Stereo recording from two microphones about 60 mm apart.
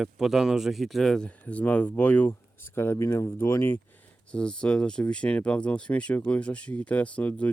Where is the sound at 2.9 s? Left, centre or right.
Left.